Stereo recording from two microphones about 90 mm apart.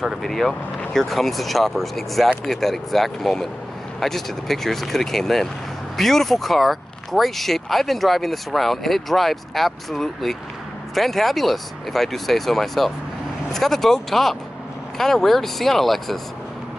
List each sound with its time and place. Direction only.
0.0 s speech: centre (ahead or behind)